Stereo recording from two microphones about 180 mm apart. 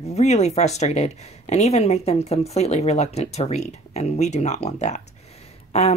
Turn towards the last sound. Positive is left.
turn(degrees=40)  # may be behind; listen again after turning